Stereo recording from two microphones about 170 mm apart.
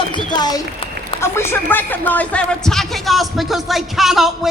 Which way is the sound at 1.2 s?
15° left (ahead or behind).